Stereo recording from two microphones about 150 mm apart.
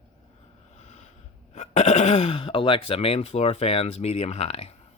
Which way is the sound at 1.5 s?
50° left (ahead or behind).